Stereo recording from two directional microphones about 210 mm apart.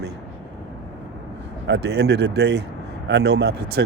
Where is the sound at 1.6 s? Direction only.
55° right (ahead or behind).